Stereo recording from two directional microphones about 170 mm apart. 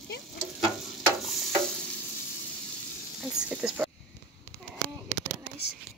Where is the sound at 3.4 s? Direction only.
5° right (ahead or behind).